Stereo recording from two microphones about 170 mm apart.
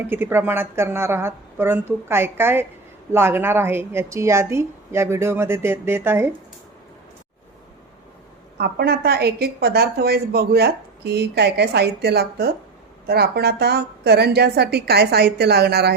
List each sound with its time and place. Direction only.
0.1 s a woman's voice: 15° right (ahead or behind)
8.5 s a woman's voice: 70° right (ahead or behind)